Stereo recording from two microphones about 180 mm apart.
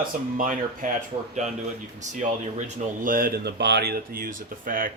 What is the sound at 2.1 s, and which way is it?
Speech, 45° right (ahead or behind).